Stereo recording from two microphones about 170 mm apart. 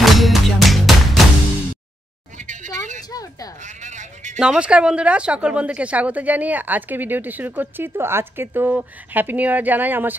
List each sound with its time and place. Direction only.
0.0 s music: centre (ahead or behind)
2.3 s a sound: 45° right (ahead or behind)
3.1 s speech: 20° left (ahead or behind)
3.6 s sheep: 45° right (ahead or behind)
4.4 s speech: 5° right (ahead or behind)